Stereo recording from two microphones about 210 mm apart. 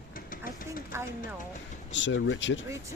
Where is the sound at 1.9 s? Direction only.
60° left (ahead or behind).